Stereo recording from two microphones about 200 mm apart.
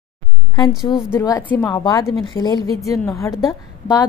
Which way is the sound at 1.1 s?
15° left (ahead or behind).